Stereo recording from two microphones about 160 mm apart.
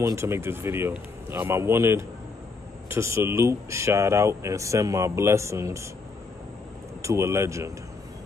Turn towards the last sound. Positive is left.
turn(degrees=-15)  # may be behind; listen again after turning